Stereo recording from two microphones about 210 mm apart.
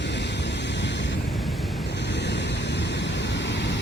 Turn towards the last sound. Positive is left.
turn(degrees=55)  # may be behind; listen again after turning